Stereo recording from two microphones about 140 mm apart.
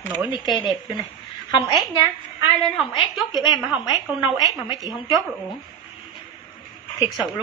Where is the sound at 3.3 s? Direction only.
30° left (ahead or behind).